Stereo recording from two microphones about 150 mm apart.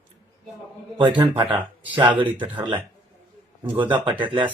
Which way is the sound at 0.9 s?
30° right (ahead or behind).